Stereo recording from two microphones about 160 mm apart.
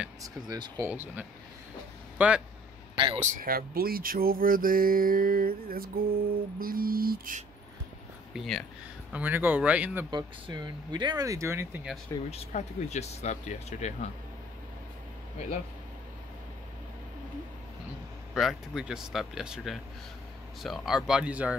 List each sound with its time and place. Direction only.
0.2 s speech: 20° right (ahead or behind)
0.8 s speech: 10° right (ahead or behind)
3.2 s speech: 55° right (ahead or behind)
8.3 s speech: centre (ahead or behind)
9.1 s speech: 10° right (ahead or behind)
10.1 s speech: 25° right (ahead or behind)
12.3 s speech: 40° left (ahead or behind)
18.3 s speech: centre (ahead or behind)